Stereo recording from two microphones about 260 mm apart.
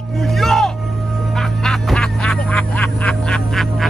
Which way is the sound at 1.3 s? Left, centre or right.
Centre.